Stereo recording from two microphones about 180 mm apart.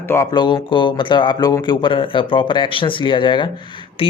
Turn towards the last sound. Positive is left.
turn(degrees=30)  # may be behind; listen again after turning